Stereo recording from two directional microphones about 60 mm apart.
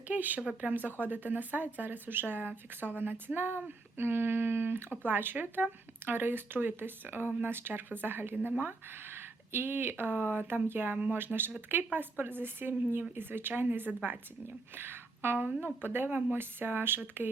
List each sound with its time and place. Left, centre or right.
0.1 s speech: right